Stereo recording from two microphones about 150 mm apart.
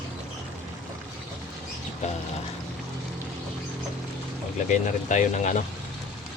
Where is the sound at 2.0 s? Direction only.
50° left (ahead or behind).